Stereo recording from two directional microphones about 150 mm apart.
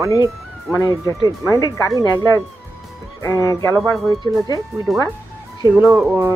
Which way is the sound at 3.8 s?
Centre (ahead or behind).